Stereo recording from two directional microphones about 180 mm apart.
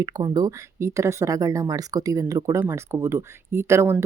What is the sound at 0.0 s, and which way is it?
Speech, 20° right (ahead or behind).